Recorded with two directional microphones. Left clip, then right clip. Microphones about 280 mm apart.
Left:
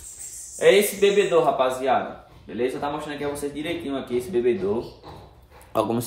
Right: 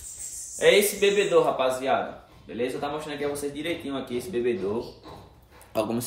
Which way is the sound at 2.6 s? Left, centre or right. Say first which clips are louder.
Left 3 dB; centre.